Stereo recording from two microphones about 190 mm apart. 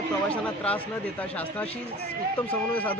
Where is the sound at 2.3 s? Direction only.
10° left (ahead or behind).